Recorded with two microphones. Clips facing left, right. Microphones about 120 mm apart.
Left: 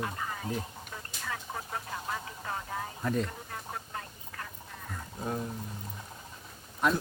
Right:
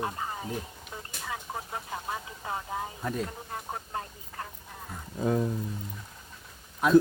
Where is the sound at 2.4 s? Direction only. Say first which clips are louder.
Right 3 dB; 15° right (ahead or behind).